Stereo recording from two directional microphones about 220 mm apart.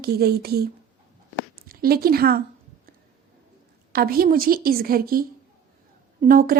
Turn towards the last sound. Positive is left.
turn(degrees=-40)  # may be behind; listen again after turning